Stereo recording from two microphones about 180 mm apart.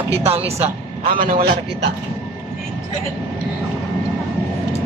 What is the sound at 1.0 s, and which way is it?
Speech, 50° right (ahead or behind).